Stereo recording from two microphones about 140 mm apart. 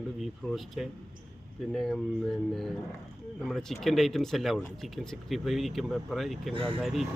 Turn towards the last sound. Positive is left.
turn(degrees=0)  # may be behind; listen again after turning